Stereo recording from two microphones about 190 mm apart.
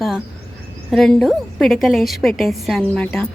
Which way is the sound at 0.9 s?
Centre (ahead or behind).